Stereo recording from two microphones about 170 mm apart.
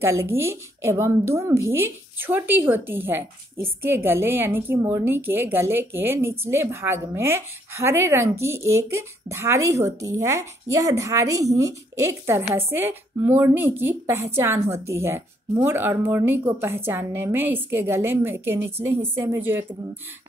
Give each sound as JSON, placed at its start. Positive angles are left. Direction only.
{"t": 0.0, "sound": "a woman's voice", "side_deg": -15}